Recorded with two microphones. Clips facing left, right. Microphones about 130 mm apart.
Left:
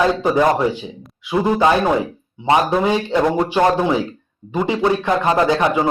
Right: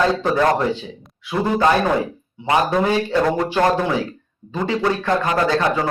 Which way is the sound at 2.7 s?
20° left (ahead or behind).